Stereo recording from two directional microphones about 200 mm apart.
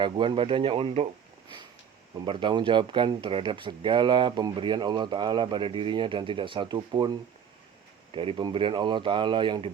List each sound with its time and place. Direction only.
0.0 s speech: 25° right (ahead or behind)
2.2 s speech: 25° right (ahead or behind)
8.1 s speech: 25° right (ahead or behind)